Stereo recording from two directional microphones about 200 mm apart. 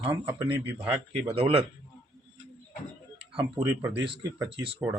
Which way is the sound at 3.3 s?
25° right (ahead or behind).